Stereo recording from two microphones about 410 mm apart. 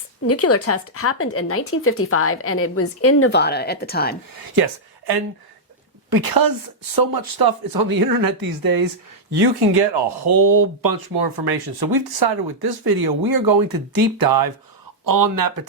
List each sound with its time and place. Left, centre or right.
0.3 s a woman's voice: left
4.3 s speech: right
9.3 s speech: right